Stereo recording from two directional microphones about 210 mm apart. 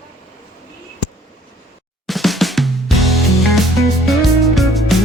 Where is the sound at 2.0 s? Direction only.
Centre (ahead or behind).